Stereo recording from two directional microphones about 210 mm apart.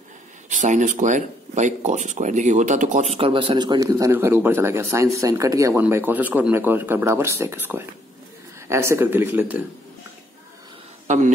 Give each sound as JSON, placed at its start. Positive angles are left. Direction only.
{"t": 0.5, "sound": "speech", "side_deg": -35}
{"t": 11.1, "sound": "a man's voice", "side_deg": -35}